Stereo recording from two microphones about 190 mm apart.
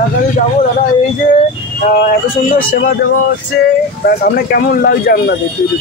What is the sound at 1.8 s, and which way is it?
Speech, 45° left (ahead or behind).